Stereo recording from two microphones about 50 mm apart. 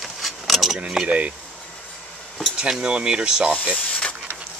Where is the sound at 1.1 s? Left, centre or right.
Right.